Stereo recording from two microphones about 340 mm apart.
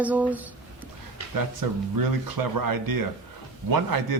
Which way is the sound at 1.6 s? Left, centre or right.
Right.